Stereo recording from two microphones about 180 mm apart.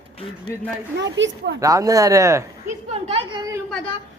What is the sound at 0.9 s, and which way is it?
Speech, 75° right (ahead or behind).